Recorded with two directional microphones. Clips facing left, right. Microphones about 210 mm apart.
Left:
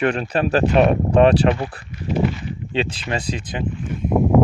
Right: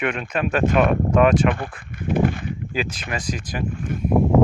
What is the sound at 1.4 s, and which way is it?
Speech, 55° right (ahead or behind).